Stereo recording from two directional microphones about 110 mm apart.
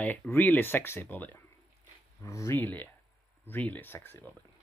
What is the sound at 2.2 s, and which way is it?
Speech, 25° left (ahead or behind).